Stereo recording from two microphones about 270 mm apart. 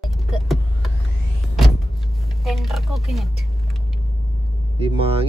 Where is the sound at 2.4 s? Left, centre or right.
Centre.